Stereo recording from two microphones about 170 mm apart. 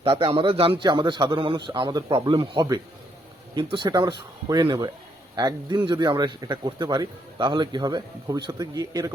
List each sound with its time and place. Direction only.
0.0 s speech: 35° right (ahead or behind)